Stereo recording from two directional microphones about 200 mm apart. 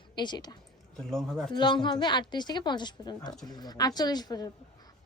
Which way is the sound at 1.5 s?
20° left (ahead or behind).